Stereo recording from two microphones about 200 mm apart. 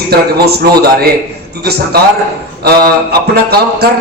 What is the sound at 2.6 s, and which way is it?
A man's voice, 50° right (ahead or behind).